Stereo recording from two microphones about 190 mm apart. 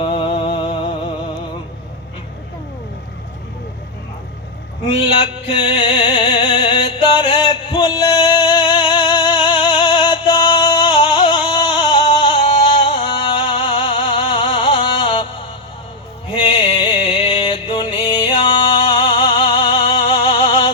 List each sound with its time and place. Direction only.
0.0 s music: 25° left (ahead or behind)
5.5 s music: 30° left (ahead or behind)
16.3 s music: 30° left (ahead or behind)